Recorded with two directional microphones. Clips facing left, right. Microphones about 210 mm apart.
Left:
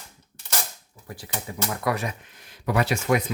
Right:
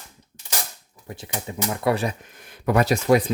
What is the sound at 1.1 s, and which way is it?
Speech, 25° right (ahead or behind).